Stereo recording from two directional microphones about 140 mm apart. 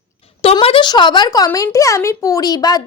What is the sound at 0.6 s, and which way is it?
A woman's voice, 35° left (ahead or behind).